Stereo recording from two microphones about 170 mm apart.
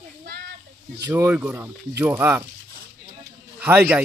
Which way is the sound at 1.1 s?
10° right (ahead or behind).